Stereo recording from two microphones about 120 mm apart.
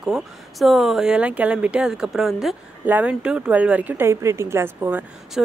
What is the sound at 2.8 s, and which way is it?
A woman's voice, 15° right (ahead or behind).